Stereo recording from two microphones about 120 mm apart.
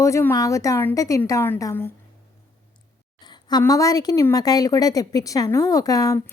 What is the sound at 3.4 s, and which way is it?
A woman's voice, 30° left (ahead or behind).